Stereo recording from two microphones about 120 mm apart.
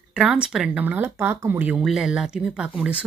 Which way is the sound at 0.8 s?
15° right (ahead or behind).